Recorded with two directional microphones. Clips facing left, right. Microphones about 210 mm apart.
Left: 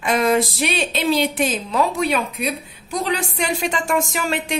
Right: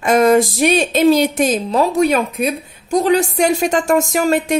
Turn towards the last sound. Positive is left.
turn(degrees=-45)  # may be behind; listen again after turning